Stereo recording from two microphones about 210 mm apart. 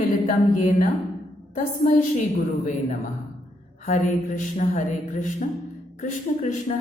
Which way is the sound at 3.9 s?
35° left (ahead or behind).